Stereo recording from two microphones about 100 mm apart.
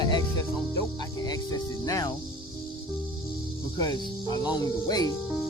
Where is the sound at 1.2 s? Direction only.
40° left (ahead or behind).